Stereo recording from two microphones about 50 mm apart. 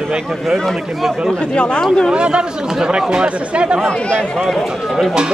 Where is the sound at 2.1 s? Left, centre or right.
Centre.